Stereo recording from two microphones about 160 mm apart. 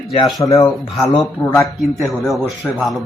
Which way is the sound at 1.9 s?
Centre (ahead or behind).